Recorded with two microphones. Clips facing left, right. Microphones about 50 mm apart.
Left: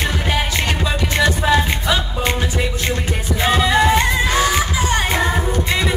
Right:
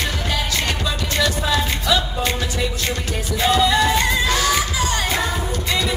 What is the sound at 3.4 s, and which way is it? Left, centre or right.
Music, left.